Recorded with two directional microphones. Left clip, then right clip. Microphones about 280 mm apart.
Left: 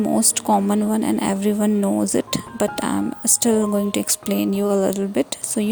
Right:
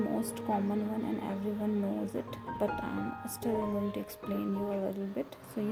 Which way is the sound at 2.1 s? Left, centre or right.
Left.